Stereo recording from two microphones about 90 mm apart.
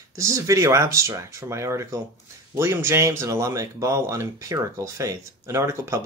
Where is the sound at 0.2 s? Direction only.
35° right (ahead or behind).